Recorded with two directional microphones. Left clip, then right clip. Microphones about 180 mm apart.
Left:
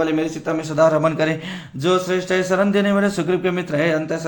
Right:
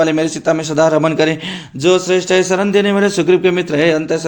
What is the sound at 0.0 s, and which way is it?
A man's voice, 45° right (ahead or behind).